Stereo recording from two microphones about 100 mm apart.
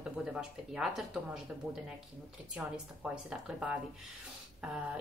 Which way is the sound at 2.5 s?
10° right (ahead or behind).